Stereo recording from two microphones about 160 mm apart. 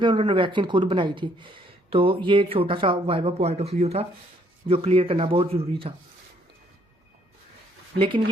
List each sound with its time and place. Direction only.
0.0 s speech: 30° right (ahead or behind)
7.9 s speech: 30° right (ahead or behind)